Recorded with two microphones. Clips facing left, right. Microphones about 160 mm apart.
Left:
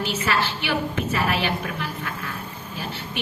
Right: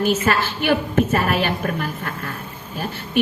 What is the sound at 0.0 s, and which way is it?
A woman's voice, 50° right (ahead or behind).